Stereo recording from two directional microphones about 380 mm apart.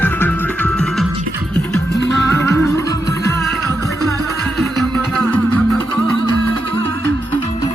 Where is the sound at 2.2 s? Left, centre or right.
Centre.